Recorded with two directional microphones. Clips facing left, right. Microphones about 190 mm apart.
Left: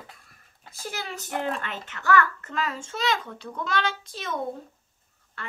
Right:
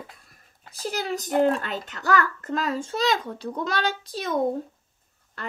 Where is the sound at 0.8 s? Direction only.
35° right (ahead or behind).